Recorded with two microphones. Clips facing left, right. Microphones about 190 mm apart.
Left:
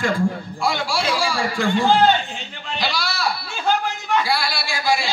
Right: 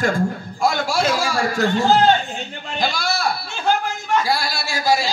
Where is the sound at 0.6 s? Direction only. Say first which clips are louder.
Right 3 dB; 45° right (ahead or behind).